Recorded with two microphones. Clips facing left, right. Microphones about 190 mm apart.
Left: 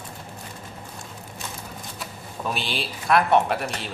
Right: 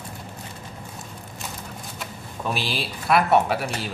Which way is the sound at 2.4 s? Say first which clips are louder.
Right 1 dB; centre (ahead or behind).